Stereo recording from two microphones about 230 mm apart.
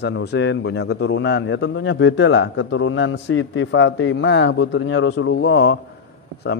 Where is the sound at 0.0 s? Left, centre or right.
Left.